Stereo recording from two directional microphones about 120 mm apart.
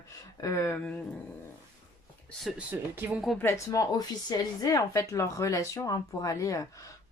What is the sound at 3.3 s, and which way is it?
Speech, 20° left (ahead or behind).